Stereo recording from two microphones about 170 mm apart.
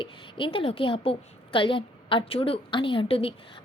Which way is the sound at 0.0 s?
30° left (ahead or behind).